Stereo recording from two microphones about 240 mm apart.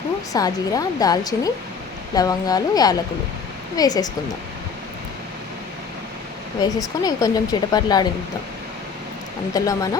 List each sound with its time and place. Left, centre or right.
0.3 s speech: centre
6.6 s speech: centre
9.6 s speech: centre